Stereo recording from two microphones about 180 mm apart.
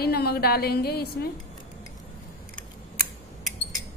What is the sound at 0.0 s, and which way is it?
A woman's voice, 60° left (ahead or behind).